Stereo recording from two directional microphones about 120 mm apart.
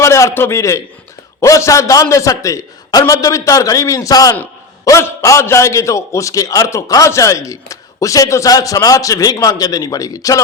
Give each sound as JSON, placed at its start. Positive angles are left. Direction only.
{"t": 0.0, "sound": "a man's voice", "side_deg": 25}